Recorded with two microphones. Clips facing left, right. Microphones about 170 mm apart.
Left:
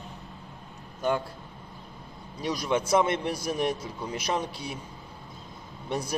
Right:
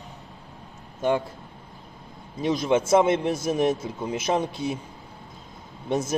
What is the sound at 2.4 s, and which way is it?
A man's voice, 25° right (ahead or behind).